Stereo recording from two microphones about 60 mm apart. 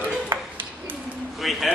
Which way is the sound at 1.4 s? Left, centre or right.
Centre.